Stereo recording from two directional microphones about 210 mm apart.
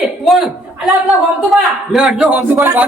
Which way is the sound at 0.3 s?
Centre (ahead or behind).